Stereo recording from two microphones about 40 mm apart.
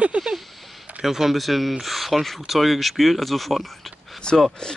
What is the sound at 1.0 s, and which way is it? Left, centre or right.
Speech, centre.